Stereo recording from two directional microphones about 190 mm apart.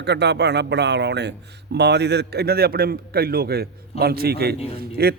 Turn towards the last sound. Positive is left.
turn(degrees=-55)  # may be behind; listen again after turning